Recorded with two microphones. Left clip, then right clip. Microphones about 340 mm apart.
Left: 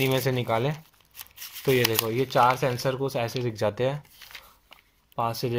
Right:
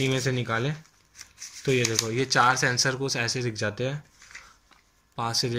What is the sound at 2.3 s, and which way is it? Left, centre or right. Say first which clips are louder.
Speech: even; centre.